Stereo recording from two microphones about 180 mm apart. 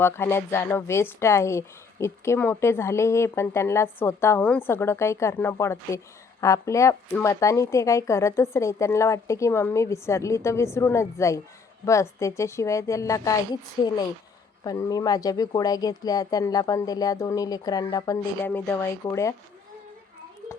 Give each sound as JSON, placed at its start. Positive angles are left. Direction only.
{"t": 0.0, "sound": "speech", "side_deg": 15}
{"t": 13.8, "sound": "speech", "side_deg": 25}